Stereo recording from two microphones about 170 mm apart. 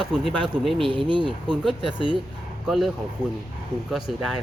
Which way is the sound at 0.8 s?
30° right (ahead or behind).